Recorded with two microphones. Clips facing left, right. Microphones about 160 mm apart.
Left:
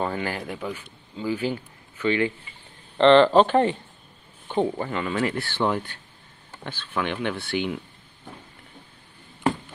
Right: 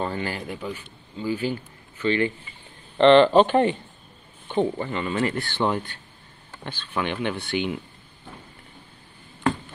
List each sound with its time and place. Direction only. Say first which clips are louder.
0.0 s speech: left 1 dB; 10° left (ahead or behind)
3.0 s speech: right 1 dB; 30° left (ahead or behind)
4.5 s speech: even; 10° left (ahead or behind)
6.9 s speech: even; 5° right (ahead or behind)